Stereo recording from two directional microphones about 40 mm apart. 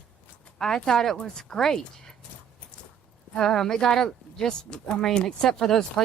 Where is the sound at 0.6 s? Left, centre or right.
Centre.